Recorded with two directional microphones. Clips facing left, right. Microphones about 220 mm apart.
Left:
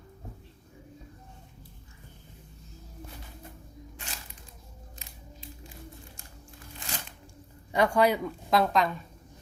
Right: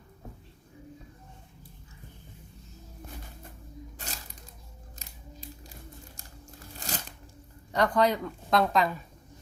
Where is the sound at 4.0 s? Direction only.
40° right (ahead or behind).